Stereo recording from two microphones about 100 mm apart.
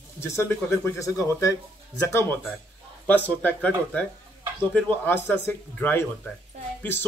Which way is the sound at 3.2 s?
15° left (ahead or behind).